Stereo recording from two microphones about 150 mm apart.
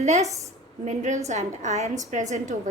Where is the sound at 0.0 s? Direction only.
50° right (ahead or behind).